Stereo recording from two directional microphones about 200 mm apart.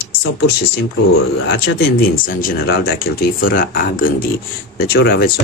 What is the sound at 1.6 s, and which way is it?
Speech, 45° left (ahead or behind).